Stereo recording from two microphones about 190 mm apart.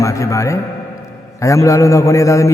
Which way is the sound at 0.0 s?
15° left (ahead or behind).